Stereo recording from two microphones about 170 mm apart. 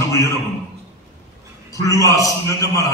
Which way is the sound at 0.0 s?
15° left (ahead or behind).